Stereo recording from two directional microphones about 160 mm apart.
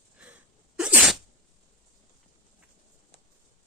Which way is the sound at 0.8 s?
5° right (ahead or behind).